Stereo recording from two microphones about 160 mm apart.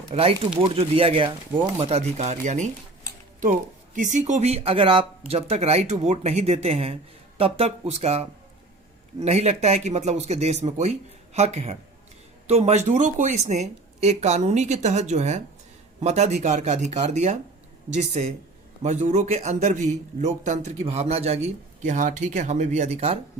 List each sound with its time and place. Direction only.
0.1 s speech: 35° right (ahead or behind)
3.9 s speech: 50° right (ahead or behind)
9.2 s speech: 40° right (ahead or behind)